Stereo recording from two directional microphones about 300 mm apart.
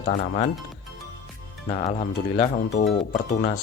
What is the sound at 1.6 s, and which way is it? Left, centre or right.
Speech, centre.